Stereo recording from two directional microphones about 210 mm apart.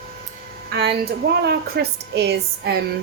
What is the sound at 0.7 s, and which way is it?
A woman's voice, 50° right (ahead or behind).